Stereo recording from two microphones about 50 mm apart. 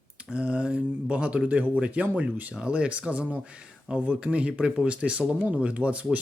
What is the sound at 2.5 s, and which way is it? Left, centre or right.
Speech, right.